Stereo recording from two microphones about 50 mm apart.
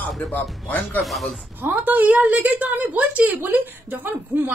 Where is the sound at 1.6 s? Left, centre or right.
Right.